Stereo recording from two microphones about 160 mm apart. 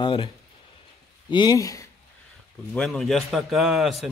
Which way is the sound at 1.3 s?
25° left (ahead or behind).